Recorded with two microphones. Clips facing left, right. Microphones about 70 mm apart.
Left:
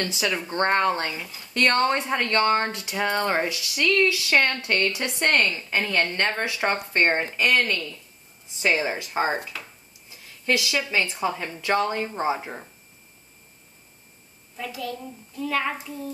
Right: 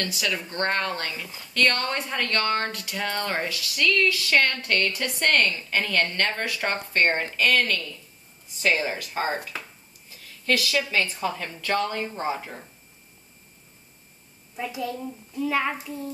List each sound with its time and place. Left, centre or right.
0.0 s speech: left
14.6 s a child's voice: right
15.4 s a child's voice: centre